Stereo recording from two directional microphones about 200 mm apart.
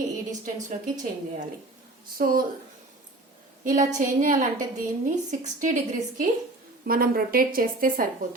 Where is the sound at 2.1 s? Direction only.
45° right (ahead or behind).